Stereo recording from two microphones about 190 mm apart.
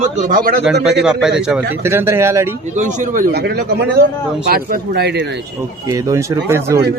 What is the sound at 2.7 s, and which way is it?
A man's voice, 40° right (ahead or behind).